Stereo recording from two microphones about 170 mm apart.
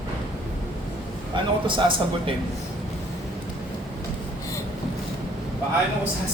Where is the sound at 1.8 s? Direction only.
30° right (ahead or behind).